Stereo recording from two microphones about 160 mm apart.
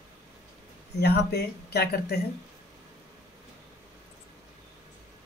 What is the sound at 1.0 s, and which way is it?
Speech, 90° left.